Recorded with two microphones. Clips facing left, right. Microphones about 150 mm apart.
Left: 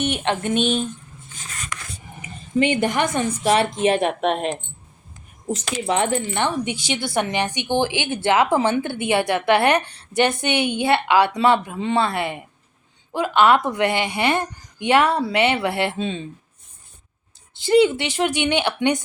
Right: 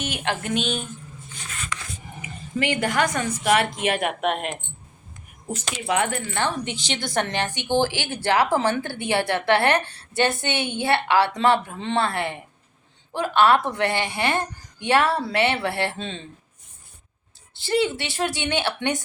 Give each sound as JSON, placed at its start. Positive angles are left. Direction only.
{"t": 0.0, "sound": "speech", "side_deg": 25}
{"t": 2.6, "sound": "speech", "side_deg": 20}
{"t": 5.9, "sound": "a woman's voice", "side_deg": 25}
{"t": 17.6, "sound": "a woman's voice", "side_deg": 20}